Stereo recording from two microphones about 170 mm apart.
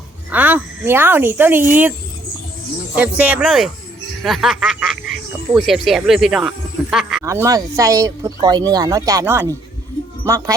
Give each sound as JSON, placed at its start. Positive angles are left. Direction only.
{"t": 0.3, "sound": "speech", "side_deg": -10}
{"t": 2.9, "sound": "speech", "side_deg": -10}
{"t": 7.3, "sound": "speech", "side_deg": -20}